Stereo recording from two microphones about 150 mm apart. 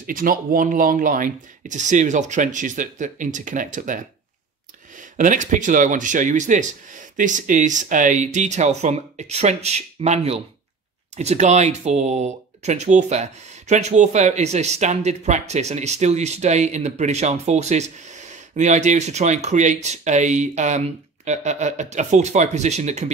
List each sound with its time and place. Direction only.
0.0 s speech: 70° right (ahead or behind)
5.1 s speech: 60° right (ahead or behind)